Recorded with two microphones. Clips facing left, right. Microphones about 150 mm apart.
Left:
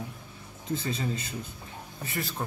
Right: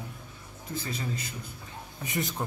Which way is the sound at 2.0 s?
20° right (ahead or behind).